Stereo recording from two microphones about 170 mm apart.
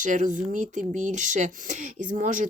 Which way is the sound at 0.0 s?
50° right (ahead or behind).